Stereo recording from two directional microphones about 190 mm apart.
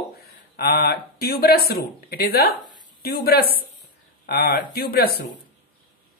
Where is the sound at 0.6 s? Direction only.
55° left (ahead or behind).